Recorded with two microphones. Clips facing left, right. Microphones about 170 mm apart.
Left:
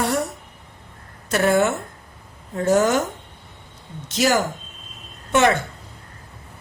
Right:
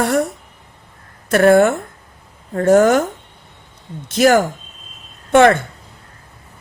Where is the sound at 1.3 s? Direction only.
55° right (ahead or behind).